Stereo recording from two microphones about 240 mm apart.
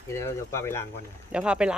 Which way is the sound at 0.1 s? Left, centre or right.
Centre.